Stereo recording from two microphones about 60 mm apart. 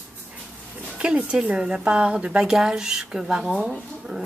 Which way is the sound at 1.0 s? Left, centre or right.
Centre.